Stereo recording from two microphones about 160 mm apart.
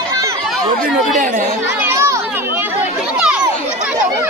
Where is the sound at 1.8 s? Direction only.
15° right (ahead or behind).